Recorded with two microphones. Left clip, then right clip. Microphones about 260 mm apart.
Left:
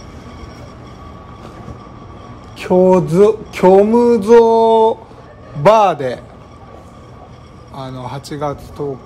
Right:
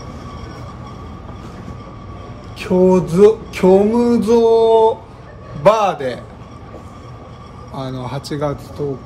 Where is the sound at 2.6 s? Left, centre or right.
Left.